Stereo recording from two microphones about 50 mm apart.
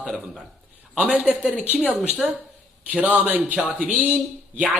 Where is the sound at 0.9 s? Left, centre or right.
Right.